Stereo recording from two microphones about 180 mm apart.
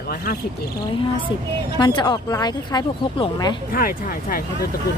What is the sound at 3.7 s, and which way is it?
Speech, 55° left (ahead or behind).